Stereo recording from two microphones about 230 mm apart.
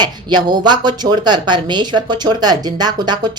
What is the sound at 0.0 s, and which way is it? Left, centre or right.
Speech, centre.